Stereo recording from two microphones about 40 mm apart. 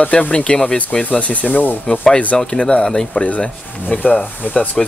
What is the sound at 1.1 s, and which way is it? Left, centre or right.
Speech, left.